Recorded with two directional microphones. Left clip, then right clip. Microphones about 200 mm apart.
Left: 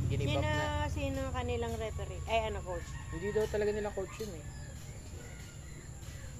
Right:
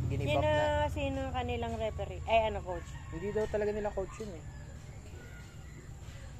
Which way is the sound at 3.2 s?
15° left (ahead or behind).